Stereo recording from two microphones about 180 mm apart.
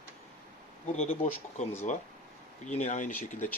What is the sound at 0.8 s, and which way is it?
Speech, 40° left (ahead or behind).